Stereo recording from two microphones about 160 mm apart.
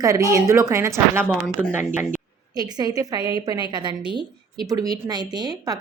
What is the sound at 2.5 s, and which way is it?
A woman's voice, 25° right (ahead or behind).